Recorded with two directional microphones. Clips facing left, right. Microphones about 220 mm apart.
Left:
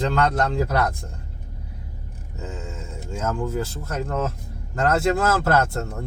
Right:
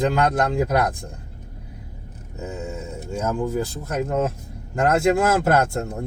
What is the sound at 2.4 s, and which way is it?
Speech, 10° right (ahead or behind).